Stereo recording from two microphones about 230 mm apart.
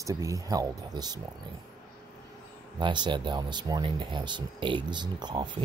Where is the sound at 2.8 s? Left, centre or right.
Centre.